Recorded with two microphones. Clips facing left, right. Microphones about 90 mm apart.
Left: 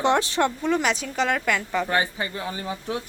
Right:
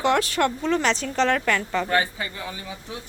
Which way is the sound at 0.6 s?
10° left (ahead or behind).